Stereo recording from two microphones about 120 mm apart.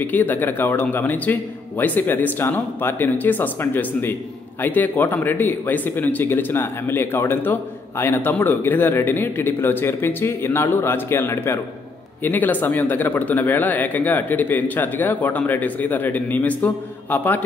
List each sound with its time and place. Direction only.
0.0 s speech: 15° left (ahead or behind)